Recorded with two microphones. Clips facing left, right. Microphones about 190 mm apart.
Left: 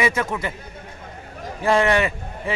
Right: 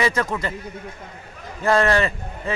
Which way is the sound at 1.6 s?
15° left (ahead or behind).